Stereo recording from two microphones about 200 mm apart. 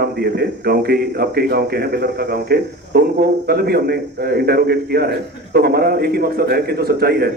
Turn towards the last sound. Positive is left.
turn(degrees=-50)  # may be behind; listen again after turning